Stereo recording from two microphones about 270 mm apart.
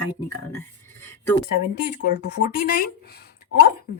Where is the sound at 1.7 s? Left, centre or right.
Left.